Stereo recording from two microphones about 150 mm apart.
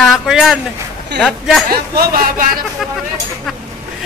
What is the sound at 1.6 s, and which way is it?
Speech, 80° right.